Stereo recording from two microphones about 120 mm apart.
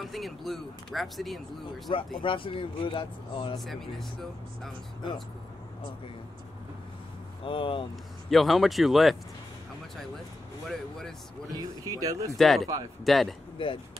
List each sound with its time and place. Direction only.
0.0 s speech: centre (ahead or behind)
2.1 s speech: 45° left (ahead or behind)
3.5 s speech: centre (ahead or behind)
7.4 s speech: 45° left (ahead or behind)
8.3 s speech: centre (ahead or behind)
10.7 s speech: 5° left (ahead or behind)
11.5 s speech: 30° right (ahead or behind)
12.4 s speech: centre (ahead or behind)
13.6 s speech: 45° left (ahead or behind)